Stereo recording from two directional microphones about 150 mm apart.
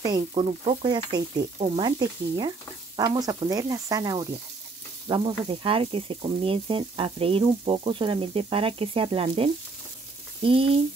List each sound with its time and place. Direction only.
0.3 s speech: 40° right (ahead or behind)
0.8 s speech: 30° right (ahead or behind)